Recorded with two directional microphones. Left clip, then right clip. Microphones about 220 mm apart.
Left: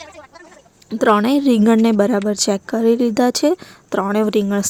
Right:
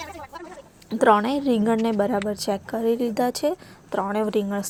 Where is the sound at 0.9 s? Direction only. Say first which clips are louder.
Left 3 dB; 30° left (ahead or behind).